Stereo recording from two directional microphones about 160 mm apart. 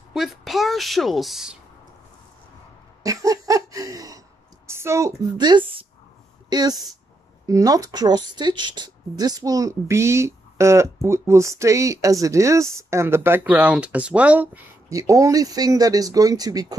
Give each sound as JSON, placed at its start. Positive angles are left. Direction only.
{"t": 0.1, "sound": "a woman's voice", "side_deg": 0}
{"t": 3.0, "sound": "a sound", "side_deg": -20}
{"t": 4.6, "sound": "a woman's voice", "side_deg": -15}